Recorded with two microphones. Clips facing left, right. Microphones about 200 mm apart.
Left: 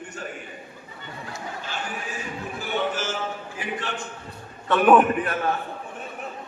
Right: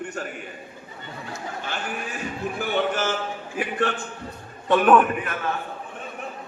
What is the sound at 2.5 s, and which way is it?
A man's voice, 60° right (ahead or behind).